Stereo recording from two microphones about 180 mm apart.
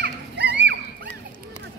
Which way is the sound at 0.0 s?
70° right (ahead or behind).